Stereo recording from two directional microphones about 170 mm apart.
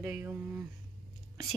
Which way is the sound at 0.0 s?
10° right (ahead or behind).